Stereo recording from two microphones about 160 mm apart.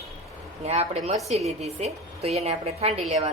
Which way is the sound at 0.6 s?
40° right (ahead or behind).